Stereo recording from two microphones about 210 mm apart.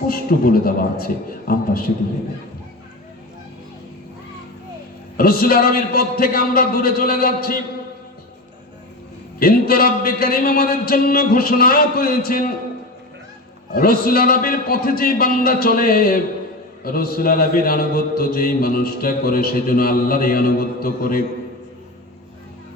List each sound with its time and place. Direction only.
0.1 s a man's voice: 45° left (ahead or behind)
5.1 s a man's voice: 45° left (ahead or behind)
9.4 s a man's voice: 45° left (ahead or behind)
13.7 s a man's voice: 45° left (ahead or behind)